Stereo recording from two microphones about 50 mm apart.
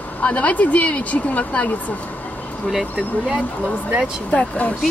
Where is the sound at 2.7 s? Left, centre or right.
Centre.